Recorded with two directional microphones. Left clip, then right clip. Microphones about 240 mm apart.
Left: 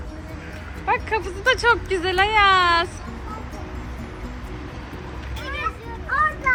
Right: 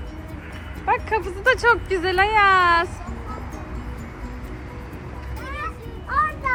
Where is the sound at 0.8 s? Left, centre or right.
Centre.